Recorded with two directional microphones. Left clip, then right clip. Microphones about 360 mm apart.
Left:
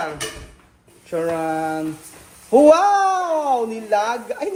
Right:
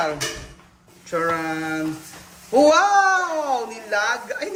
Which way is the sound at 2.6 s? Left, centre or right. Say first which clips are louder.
Left 1 dB; centre.